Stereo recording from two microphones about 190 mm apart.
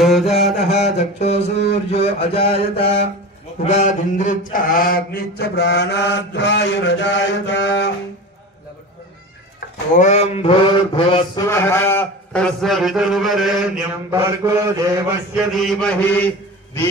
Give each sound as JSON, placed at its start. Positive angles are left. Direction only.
{"t": 0.0, "sound": "mantra", "side_deg": 0}
{"t": 0.9, "sound": "a sound", "side_deg": 35}
{"t": 3.6, "sound": "mantra", "side_deg": 35}
{"t": 9.9, "sound": "mantra", "side_deg": 35}
{"t": 11.4, "sound": "a man's voice", "side_deg": 15}
{"t": 14.1, "sound": "mantra", "side_deg": -15}
{"t": 15.3, "sound": "a man's voice", "side_deg": 0}